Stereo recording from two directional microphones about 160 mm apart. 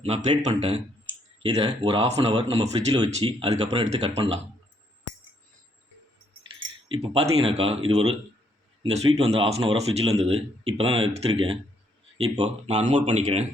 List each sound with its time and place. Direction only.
0.0 s speech: 45° right (ahead or behind)
3.6 s speech: 40° right (ahead or behind)
6.8 s speech: 35° right (ahead or behind)